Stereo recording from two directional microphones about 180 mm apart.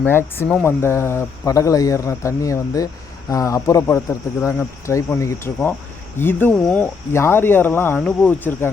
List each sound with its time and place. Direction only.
0.0 s speech: 10° left (ahead or behind)